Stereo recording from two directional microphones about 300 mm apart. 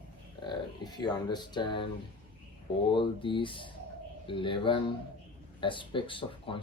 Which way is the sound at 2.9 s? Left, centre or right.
Centre.